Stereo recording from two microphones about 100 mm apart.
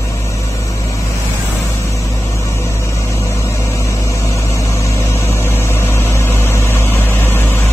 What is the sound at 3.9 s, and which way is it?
Vehicle, 30° left (ahead or behind).